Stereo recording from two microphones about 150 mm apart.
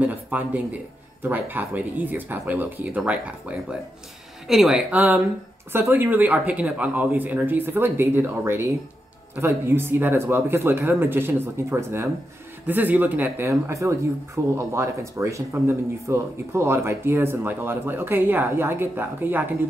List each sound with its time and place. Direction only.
0.0 s a sound: 10° right (ahead or behind)
1.2 s a woman's voice: 10° right (ahead or behind)
5.7 s speech: 15° right (ahead or behind)